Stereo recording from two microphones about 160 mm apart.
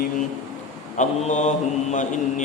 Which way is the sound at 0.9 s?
50° left (ahead or behind).